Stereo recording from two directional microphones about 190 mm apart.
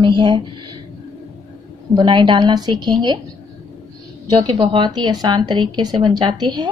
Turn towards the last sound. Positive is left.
turn(degrees=-20)  # may be behind; listen again after turning